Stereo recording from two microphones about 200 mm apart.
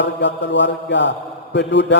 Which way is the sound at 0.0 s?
60° left (ahead or behind).